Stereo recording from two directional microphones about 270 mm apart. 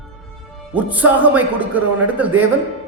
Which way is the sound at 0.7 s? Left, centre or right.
Centre.